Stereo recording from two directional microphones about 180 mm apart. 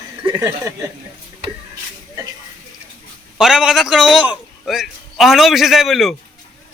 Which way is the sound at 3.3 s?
5° right (ahead or behind).